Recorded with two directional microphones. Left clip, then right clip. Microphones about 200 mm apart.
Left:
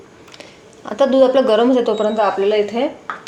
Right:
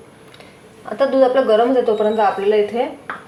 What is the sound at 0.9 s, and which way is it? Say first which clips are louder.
Speech: left 2 dB; 45° left (ahead or behind).